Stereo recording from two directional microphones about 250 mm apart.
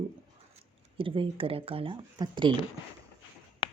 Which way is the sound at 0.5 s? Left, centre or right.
Right.